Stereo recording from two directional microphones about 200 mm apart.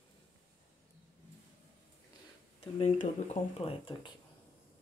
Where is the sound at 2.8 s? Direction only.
30° left (ahead or behind).